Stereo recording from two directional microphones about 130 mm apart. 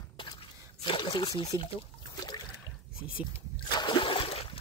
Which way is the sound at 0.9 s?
40° left (ahead or behind).